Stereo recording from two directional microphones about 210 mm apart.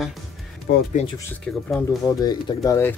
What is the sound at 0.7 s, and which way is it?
Speech, 50° left (ahead or behind).